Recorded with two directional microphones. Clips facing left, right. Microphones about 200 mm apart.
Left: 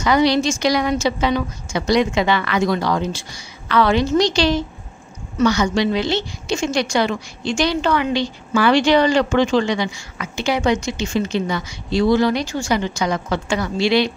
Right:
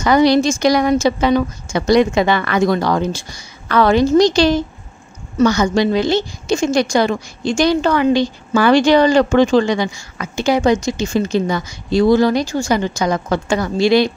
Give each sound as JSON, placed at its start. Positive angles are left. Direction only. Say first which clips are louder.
{"t": 0.0, "sound": "a woman's voice", "louder": "right 4 dB", "side_deg": -50}